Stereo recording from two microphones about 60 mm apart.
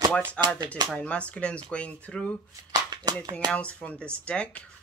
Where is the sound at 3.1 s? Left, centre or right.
Right.